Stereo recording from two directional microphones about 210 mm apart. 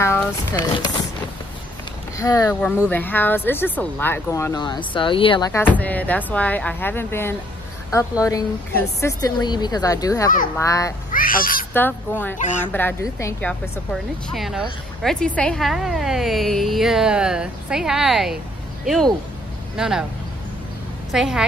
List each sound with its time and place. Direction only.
0.0 s speech: 10° left (ahead or behind)
2.1 s speech: 15° left (ahead or behind)
5.8 s speech: 5° left (ahead or behind)
11.1 s speech: 40° left (ahead or behind)
11.7 s a woman's voice: 10° left (ahead or behind)
21.1 s a woman's voice: centre (ahead or behind)